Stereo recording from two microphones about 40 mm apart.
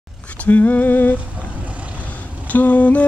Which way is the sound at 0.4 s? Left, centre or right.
Left.